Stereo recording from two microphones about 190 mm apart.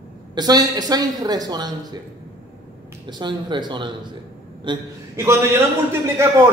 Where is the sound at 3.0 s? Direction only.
25° right (ahead or behind).